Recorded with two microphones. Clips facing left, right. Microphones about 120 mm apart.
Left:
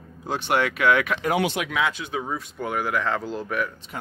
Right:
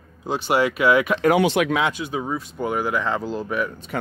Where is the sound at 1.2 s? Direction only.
75° right (ahead or behind).